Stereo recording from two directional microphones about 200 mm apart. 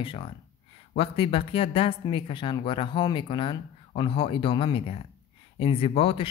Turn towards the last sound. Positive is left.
turn(degrees=30)  # may be behind; listen again after turning